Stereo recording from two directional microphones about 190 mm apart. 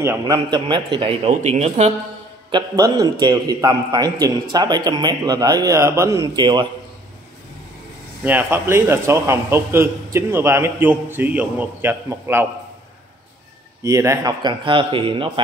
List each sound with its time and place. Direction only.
0.0 s a man's voice: 15° right (ahead or behind); by 2.0 s 35° right (ahead or behind)
2.5 s a man's voice: 20° right (ahead or behind)
8.2 s a man's voice: 10° right (ahead or behind)
13.8 s a man's voice: 15° right (ahead or behind)